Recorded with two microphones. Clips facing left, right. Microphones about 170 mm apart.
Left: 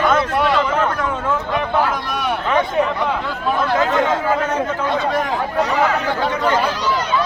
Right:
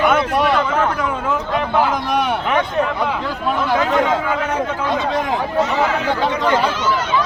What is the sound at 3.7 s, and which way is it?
Speech, 15° right (ahead or behind).